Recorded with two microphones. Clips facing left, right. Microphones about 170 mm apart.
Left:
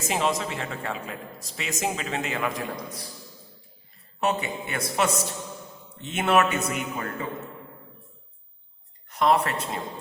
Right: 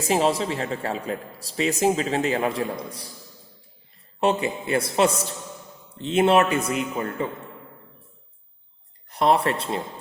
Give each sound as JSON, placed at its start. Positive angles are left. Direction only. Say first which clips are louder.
{"t": 0.1, "sound": "a man's voice", "louder": "right 5 dB", "side_deg": -35}
{"t": 4.2, "sound": "a man's voice", "louder": "right 4 dB", "side_deg": -30}
{"t": 9.0, "sound": "speech", "louder": "right 2 dB", "side_deg": -35}